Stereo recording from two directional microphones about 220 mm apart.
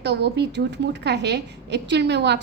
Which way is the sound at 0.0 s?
50° right (ahead or behind).